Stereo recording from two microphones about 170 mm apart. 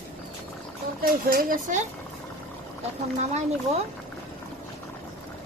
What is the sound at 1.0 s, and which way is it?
Speech, 55° right (ahead or behind).